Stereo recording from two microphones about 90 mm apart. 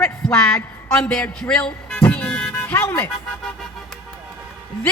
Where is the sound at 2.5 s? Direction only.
25° left (ahead or behind).